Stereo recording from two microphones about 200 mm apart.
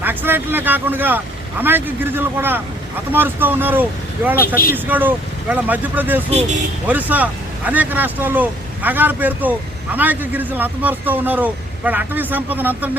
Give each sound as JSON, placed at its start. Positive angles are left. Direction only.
{"t": 0.0, "sound": "speech", "side_deg": -10}
{"t": 4.4, "sound": "speech", "side_deg": 45}
{"t": 4.7, "sound": "speech", "side_deg": -10}